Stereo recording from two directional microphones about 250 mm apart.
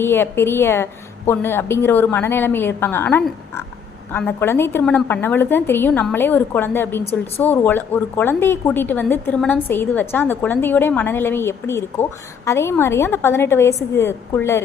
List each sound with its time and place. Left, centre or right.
0.0 s a woman's voice: centre
7.0 s a woman's voice: left
7.4 s a woman's voice: centre